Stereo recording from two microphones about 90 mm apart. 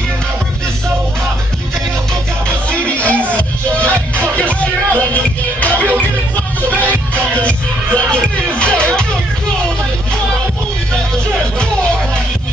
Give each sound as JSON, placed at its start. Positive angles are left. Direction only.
{"t": 2.4, "sound": "music", "side_deg": 15}